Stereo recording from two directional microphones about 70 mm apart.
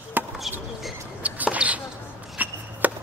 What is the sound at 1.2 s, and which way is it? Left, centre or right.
Basketball bounce, right.